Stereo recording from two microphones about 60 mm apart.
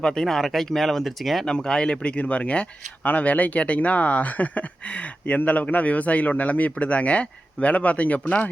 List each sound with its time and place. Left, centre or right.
0.0 s speech: centre
1.5 s speech: centre